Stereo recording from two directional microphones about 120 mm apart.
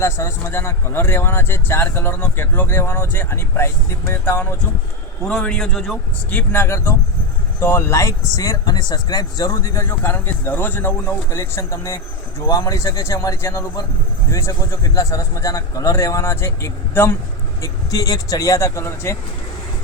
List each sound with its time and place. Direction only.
0.0 s speech: 20° left (ahead or behind)
5.3 s a man's voice: 5° left (ahead or behind)
6.3 s speech: 15° left (ahead or behind)